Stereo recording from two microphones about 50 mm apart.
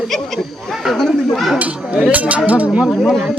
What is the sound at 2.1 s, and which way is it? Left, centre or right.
Speech, right.